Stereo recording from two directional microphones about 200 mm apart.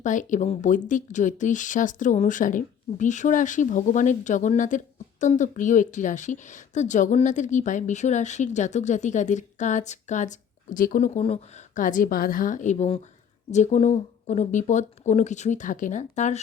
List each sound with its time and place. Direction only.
0.0 s a woman's voice: 40° left (ahead or behind)